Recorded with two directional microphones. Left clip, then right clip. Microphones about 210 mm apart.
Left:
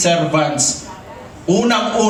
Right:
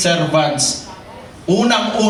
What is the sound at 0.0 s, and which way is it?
A man's voice, 15° left (ahead or behind).